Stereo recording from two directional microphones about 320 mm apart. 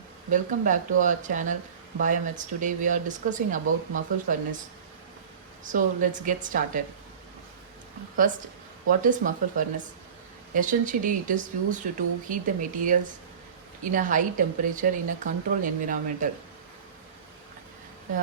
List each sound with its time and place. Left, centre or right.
0.3 s speech: right
5.6 s speech: right
8.9 s speech: right